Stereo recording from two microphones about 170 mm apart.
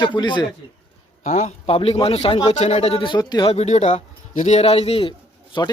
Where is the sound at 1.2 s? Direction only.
40° left (ahead or behind); by 3.5 s 25° left (ahead or behind).